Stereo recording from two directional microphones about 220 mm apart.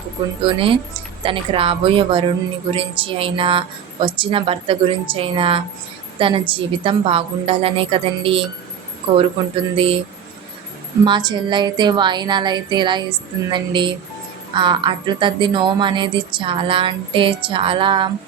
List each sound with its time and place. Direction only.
0.4 s speech: 25° right (ahead or behind)
9.7 s speech: 25° right (ahead or behind)
11.0 s speech: 20° right (ahead or behind)